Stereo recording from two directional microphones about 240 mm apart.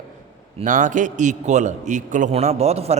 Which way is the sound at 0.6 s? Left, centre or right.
Right.